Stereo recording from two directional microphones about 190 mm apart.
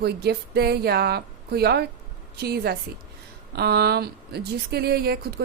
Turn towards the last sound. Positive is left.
turn(degrees=-55)  # may be behind; listen again after turning